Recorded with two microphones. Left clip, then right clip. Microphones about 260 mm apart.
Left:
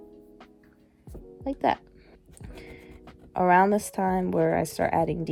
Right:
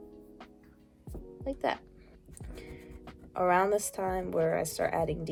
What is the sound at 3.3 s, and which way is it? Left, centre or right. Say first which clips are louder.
A woman's voice: left 6 dB; left.